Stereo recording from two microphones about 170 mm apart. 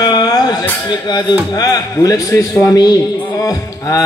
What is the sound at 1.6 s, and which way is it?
A man's voice, 20° left (ahead or behind).